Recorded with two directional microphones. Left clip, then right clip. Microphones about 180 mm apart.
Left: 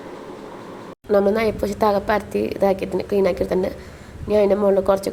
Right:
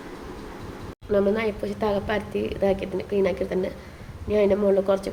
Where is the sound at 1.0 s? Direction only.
20° left (ahead or behind).